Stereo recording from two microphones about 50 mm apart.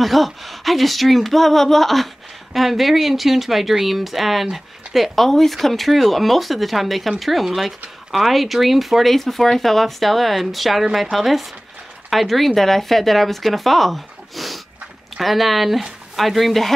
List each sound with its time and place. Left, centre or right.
0.0 s speech: centre